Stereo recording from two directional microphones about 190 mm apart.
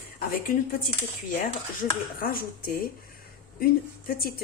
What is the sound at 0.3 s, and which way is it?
Speech, 50° left (ahead or behind).